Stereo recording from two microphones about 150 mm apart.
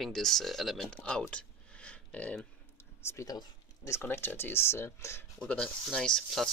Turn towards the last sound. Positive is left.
turn(degrees=5)  # may be behind; listen again after turning